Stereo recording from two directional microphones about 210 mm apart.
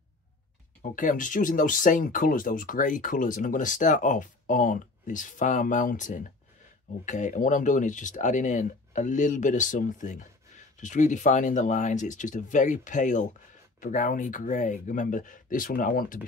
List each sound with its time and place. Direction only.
0.9 s speech: 40° left (ahead or behind)